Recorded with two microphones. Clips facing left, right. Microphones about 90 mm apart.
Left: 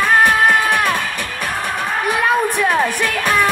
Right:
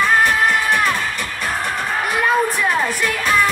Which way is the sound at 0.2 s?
55° left (ahead or behind).